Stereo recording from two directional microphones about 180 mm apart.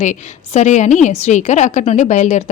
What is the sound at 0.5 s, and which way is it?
A woman's voice, 40° left (ahead or behind).